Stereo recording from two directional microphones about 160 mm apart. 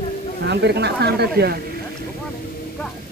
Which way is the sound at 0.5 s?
90° right.